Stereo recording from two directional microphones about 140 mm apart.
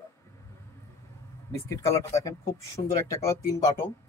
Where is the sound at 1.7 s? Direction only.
20° left (ahead or behind).